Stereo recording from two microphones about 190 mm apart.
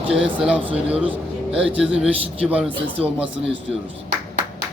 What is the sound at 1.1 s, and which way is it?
A man's voice, 5° right (ahead or behind).